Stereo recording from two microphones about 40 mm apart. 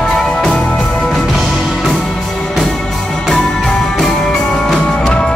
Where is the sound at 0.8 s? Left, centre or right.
Left.